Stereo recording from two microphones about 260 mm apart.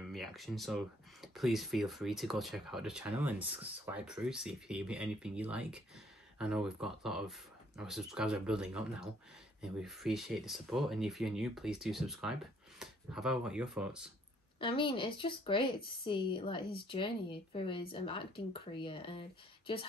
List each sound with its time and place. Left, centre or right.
0.1 s speech: centre
14.6 s speech: centre